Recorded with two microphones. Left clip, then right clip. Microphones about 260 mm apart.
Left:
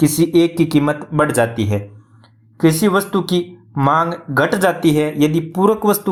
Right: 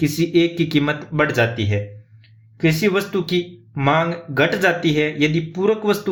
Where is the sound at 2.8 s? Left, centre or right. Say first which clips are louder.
Left 3 dB; centre.